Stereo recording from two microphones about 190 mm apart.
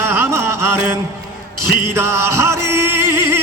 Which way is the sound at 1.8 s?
15° right (ahead or behind).